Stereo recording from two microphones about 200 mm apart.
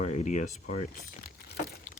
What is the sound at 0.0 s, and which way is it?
Speech, 35° left (ahead or behind).